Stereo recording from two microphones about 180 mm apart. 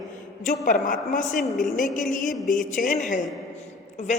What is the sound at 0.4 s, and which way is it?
A woman's voice, 45° left (ahead or behind).